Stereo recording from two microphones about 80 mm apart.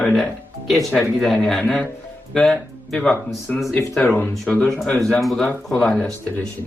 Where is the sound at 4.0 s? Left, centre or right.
Left.